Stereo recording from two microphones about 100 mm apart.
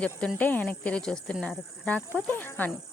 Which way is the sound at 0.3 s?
15° left (ahead or behind).